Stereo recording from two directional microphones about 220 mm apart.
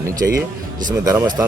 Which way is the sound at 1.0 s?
10° right (ahead or behind).